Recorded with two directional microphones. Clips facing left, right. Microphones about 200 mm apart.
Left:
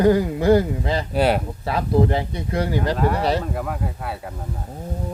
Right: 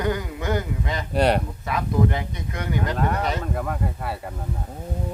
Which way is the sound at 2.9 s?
5° left (ahead or behind).